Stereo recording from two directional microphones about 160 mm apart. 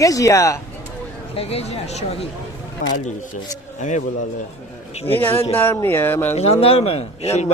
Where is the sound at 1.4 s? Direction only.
40° left (ahead or behind).